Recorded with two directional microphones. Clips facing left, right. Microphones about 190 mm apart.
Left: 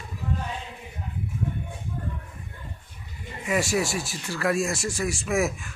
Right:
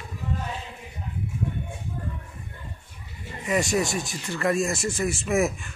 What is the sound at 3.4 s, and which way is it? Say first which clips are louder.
Speech: right 1 dB; centre (ahead or behind).